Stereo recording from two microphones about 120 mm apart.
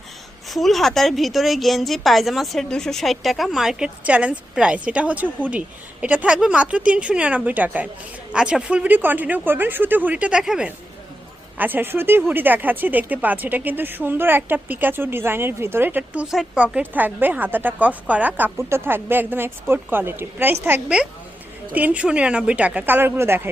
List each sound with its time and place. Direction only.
0.4 s a woman's voice: centre (ahead or behind); by 16.2 s 15° right (ahead or behind)
16.3 s speech: 5° right (ahead or behind); by 23.5 s 20° right (ahead or behind)